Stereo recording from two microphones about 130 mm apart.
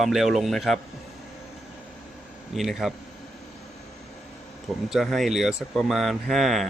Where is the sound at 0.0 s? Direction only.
Centre (ahead or behind).